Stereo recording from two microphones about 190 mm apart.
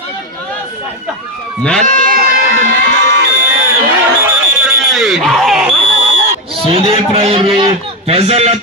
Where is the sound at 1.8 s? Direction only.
45° right (ahead or behind).